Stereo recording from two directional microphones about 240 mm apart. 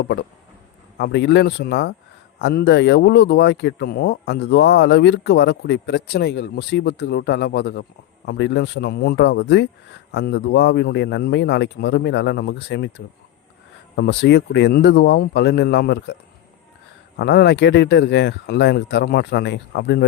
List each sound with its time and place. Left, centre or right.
0.0 s speech: left
13.9 s speech: left
17.2 s speech: left